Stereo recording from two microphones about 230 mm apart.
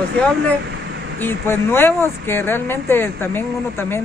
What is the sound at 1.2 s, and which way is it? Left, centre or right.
Speech, centre.